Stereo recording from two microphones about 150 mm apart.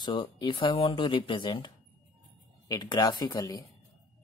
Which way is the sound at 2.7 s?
25° left (ahead or behind).